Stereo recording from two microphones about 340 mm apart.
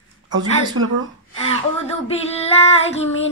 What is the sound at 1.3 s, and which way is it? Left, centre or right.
Female singing, centre.